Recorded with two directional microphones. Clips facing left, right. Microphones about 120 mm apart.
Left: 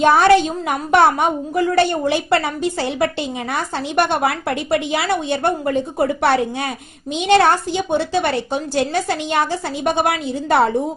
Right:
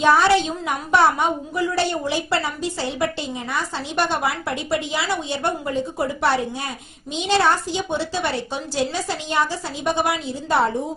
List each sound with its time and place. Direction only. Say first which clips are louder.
0.0 s a woman's voice: left 4 dB; 55° left (ahead or behind)